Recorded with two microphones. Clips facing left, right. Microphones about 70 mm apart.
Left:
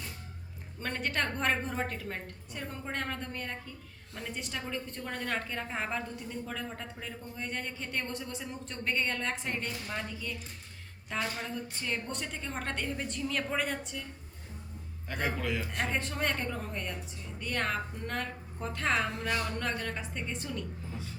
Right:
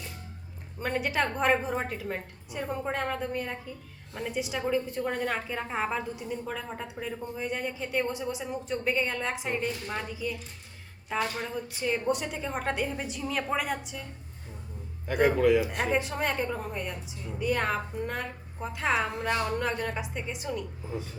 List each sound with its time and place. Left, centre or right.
0.8 s a woman's voice: centre
11.2 s a woman's voice: right
11.7 s a woman's voice: centre
15.0 s a man's voice: centre